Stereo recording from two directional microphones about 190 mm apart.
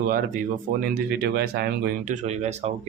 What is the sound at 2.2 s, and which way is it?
Speech, 35° right (ahead or behind).